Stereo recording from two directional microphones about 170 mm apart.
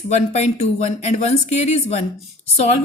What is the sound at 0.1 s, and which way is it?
A woman's voice, 40° left (ahead or behind).